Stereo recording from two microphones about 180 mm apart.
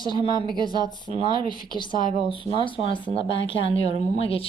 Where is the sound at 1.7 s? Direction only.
25° left (ahead or behind).